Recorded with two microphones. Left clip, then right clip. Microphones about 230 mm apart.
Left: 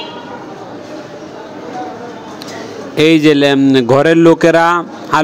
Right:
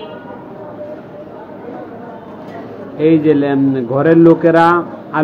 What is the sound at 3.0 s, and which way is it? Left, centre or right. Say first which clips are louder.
A man's voice: left 3 dB; left.